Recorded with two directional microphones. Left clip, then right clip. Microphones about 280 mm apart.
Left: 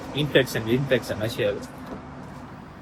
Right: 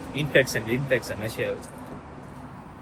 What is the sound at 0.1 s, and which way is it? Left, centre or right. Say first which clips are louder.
Speech: even; centre.